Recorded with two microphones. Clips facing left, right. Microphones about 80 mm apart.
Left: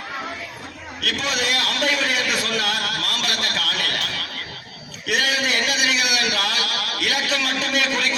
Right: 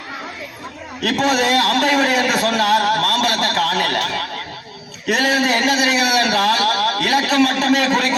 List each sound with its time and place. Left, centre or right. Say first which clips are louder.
1.0 s a man's voice: right 8 dB; right